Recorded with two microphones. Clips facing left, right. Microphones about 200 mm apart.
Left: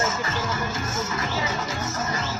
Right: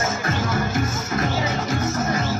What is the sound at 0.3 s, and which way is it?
Music, 60° right (ahead or behind).